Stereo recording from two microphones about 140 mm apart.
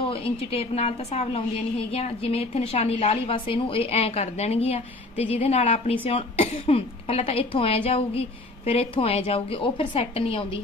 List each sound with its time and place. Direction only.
0.1 s a woman's voice: 45° left (ahead or behind)